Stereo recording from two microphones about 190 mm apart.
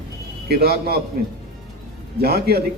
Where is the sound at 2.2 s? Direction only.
55° right (ahead or behind).